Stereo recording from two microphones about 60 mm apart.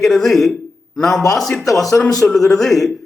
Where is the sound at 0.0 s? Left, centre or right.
Centre.